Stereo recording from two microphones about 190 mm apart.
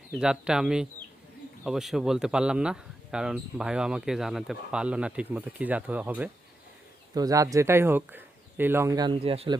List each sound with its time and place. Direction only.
0.1 s speech: 5° right (ahead or behind)
7.1 s speech: 20° right (ahead or behind)